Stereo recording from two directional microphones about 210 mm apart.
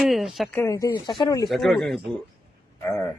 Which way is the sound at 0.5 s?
10° left (ahead or behind).